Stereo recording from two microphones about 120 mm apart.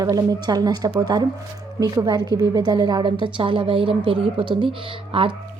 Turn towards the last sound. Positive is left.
turn(degrees=-50)  # may be behind; listen again after turning